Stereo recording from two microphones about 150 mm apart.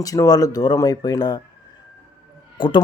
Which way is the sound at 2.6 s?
35° left (ahead or behind).